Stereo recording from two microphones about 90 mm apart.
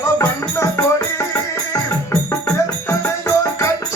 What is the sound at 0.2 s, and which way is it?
Music, 35° left (ahead or behind).